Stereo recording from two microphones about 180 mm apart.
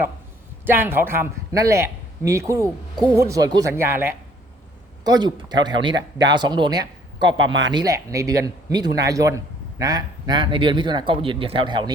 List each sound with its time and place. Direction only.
0.6 s a man's voice: 10° right (ahead or behind)